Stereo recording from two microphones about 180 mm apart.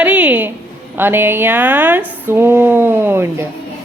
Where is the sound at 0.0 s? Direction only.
10° right (ahead or behind).